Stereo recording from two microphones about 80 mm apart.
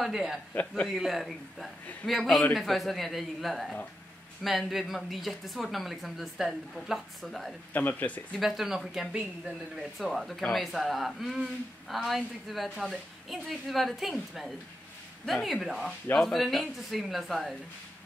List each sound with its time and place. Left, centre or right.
0.0 s speech: centre
7.7 s speech: left
8.4 s speech: centre